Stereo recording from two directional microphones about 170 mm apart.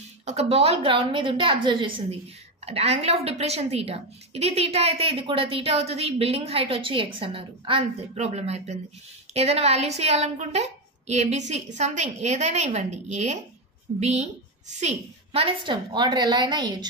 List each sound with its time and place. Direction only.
0.2 s a woman's voice: 40° right (ahead or behind)